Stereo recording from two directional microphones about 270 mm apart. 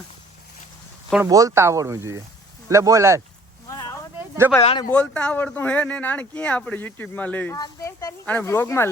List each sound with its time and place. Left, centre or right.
1.1 s speech: centre
3.7 s a sound: centre
4.6 s speech: centre
4.9 s speech: centre